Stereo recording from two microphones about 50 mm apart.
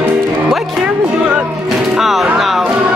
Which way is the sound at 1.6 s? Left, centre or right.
Centre.